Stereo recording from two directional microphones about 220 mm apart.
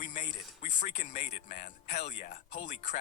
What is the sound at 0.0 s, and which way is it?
Speech, 35° left (ahead or behind).